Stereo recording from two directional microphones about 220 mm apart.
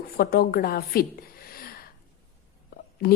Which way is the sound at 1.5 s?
40° left (ahead or behind).